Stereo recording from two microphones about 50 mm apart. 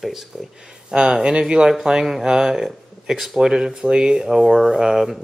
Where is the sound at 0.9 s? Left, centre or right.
Centre.